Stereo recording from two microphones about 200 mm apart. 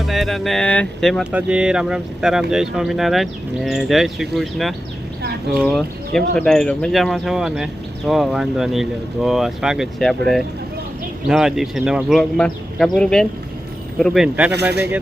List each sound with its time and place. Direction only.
0.0 s speech: centre (ahead or behind)